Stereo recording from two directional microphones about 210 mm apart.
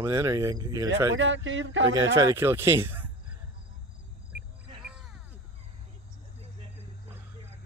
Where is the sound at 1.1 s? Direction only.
65° right (ahead or behind).